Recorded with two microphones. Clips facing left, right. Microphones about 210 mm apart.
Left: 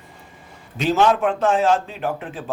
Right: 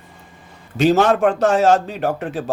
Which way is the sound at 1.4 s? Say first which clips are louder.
Right 3 dB; 75° right (ahead or behind).